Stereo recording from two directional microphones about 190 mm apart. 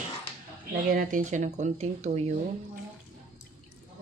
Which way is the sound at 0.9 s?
45° right (ahead or behind).